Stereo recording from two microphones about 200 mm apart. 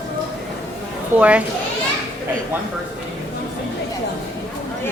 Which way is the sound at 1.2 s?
5° right (ahead or behind).